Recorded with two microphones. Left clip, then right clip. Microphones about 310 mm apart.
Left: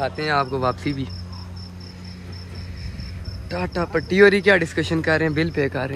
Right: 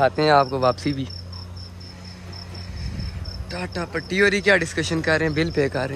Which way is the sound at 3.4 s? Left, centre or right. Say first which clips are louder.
Left 4 dB; centre.